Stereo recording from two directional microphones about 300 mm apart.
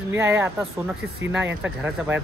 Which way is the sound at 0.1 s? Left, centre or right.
Centre.